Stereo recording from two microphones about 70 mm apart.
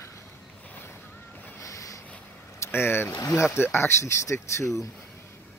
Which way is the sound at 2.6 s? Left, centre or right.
Left.